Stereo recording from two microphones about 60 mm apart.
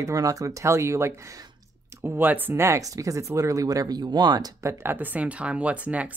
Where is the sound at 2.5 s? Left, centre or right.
Right.